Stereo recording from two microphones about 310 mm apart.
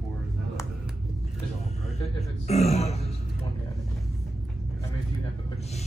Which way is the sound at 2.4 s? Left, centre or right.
Left.